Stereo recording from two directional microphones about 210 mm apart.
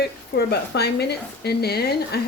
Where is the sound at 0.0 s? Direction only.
50° left (ahead or behind).